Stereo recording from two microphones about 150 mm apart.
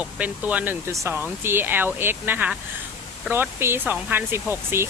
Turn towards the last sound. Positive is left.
turn(degrees=-15)  # may be behind; listen again after turning